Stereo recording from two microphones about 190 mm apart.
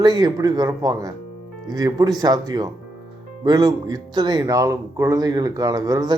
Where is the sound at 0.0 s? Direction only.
20° right (ahead or behind).